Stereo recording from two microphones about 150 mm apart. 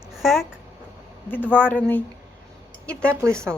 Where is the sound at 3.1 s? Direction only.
20° right (ahead or behind).